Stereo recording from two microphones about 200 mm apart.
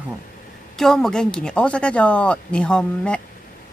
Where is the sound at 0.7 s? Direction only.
Centre (ahead or behind).